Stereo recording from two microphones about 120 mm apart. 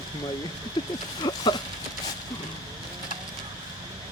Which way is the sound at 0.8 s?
35° left (ahead or behind).